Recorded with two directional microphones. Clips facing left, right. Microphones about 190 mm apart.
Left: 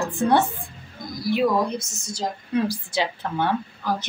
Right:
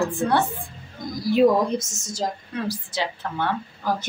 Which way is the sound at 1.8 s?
45° right (ahead or behind).